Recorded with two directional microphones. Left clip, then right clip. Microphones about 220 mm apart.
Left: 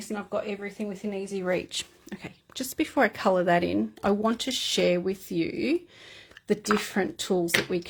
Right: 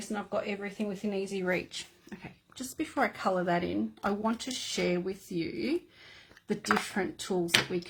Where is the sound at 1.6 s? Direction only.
45° left (ahead or behind).